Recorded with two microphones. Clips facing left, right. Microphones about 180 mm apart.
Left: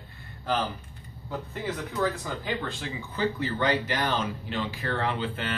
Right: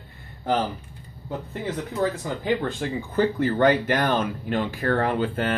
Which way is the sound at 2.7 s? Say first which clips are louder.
Right 7 dB; 50° right (ahead or behind).